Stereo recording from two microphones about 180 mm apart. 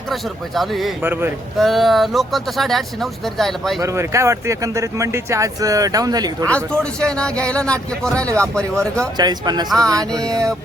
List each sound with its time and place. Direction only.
0.1 s speech: centre (ahead or behind)
1.0 s speech: 10° right (ahead or behind)
1.5 s speech: centre (ahead or behind)
3.8 s speech: 15° right (ahead or behind)
6.5 s speech: 5° left (ahead or behind)
9.1 s speech: 20° right (ahead or behind)
9.6 s speech: 5° left (ahead or behind)